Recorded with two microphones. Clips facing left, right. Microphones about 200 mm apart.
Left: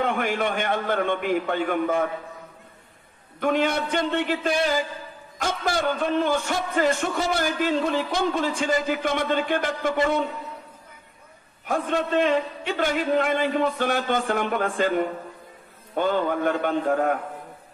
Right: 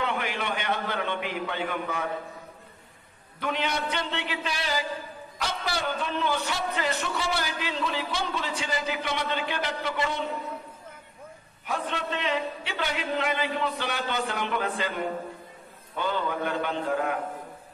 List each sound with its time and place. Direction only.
0.0 s a man's voice: 50° left (ahead or behind)
3.3 s a man's voice: 50° left (ahead or behind)
11.6 s a man's voice: 50° left (ahead or behind)